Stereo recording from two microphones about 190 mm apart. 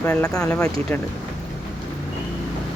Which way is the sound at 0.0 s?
5° left (ahead or behind).